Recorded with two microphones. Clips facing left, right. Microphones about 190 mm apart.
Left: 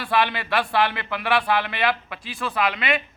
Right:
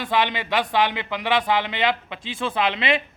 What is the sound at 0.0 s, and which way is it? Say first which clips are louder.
Speech: even; 20° right (ahead or behind).